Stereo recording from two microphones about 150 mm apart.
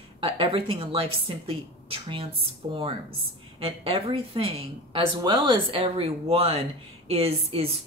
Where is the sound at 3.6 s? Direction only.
35° right (ahead or behind).